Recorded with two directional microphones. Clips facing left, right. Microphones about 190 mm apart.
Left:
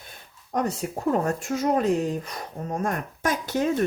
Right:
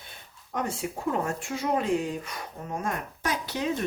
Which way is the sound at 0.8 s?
45° left (ahead or behind).